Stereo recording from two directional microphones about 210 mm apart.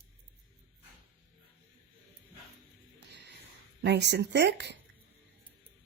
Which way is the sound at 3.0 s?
55° right (ahead or behind).